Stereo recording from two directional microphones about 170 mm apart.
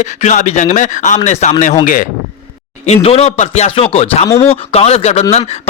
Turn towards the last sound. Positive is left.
turn(degrees=40)  # may be behind; listen again after turning